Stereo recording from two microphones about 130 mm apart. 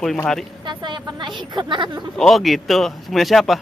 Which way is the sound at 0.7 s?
35° right (ahead or behind).